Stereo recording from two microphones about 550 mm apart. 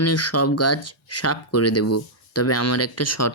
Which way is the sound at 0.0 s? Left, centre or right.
Left.